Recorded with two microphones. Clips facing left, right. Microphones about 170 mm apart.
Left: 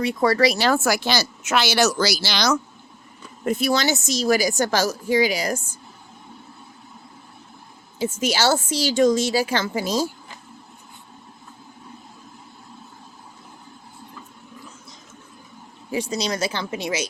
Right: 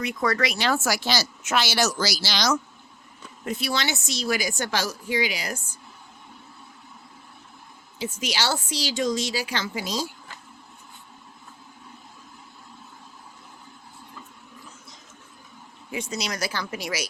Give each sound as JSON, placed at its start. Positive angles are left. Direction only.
{"t": 0.0, "sound": "speech", "side_deg": 30}
{"t": 0.8, "sound": "speech", "side_deg": 60}
{"t": 3.4, "sound": "speech", "side_deg": 45}
{"t": 7.9, "sound": "speech", "side_deg": 45}
{"t": 15.9, "sound": "speech", "side_deg": 35}